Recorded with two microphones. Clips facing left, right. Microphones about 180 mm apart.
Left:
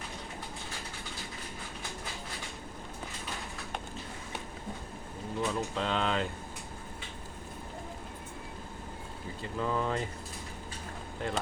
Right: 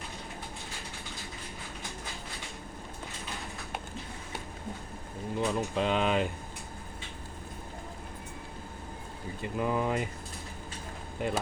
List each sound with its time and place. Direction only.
5.4 s speech: 15° right (ahead or behind)
9.4 s speech: 15° right (ahead or behind)
11.2 s speech: 15° right (ahead or behind)